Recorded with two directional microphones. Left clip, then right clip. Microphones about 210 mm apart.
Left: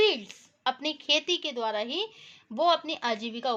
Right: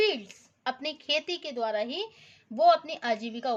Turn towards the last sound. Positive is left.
turn(degrees=15)  # may be behind; listen again after turning